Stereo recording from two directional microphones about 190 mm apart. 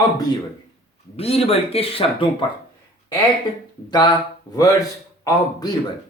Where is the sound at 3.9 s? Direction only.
20° left (ahead or behind).